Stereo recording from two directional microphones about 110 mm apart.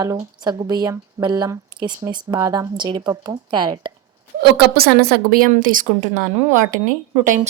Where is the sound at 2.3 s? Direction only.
30° right (ahead or behind).